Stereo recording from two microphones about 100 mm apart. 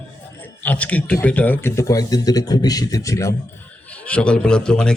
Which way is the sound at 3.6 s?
15° left (ahead or behind).